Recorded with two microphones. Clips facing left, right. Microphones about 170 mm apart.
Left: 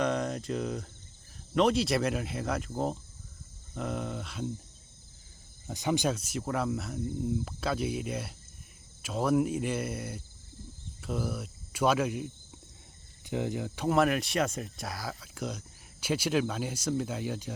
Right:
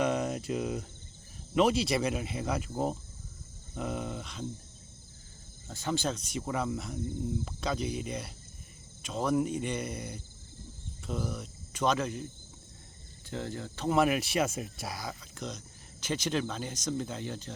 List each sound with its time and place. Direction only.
0.0 s a sound: 5° right (ahead or behind)
1.5 s speech: centre (ahead or behind)
5.6 s speech: 15° left (ahead or behind)
11.0 s cricket: 5° left (ahead or behind)
13.2 s speech: 15° left (ahead or behind)